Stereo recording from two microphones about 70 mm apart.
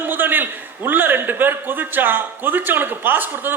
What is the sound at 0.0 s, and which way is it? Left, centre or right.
A man's voice, right.